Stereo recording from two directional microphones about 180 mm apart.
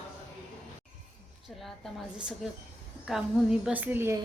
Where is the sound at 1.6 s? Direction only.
Centre (ahead or behind).